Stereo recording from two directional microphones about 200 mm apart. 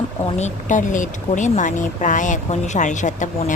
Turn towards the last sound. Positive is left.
turn(degrees=40)  # may be behind; listen again after turning